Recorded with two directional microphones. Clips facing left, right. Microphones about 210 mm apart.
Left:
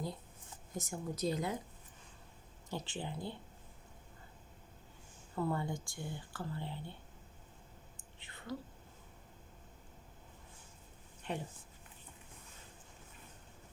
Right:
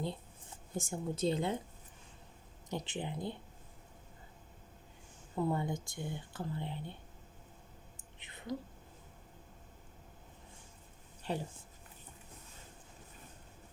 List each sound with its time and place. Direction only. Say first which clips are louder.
0.7 s speech: right 3 dB; 30° right (ahead or behind)
2.6 s speech: right 2 dB; 20° right (ahead or behind)
5.4 s speech: right 2 dB; 20° right (ahead or behind)
8.2 s whispering: right 3 dB; 20° right (ahead or behind)
11.2 s speech: right 3 dB; 35° right (ahead or behind)